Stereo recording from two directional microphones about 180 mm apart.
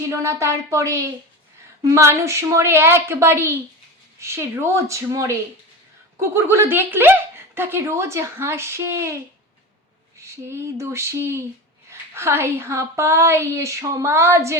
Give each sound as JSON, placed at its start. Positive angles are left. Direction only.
{"t": 0.1, "sound": "speech", "side_deg": -15}
{"t": 10.2, "sound": "speech", "side_deg": -15}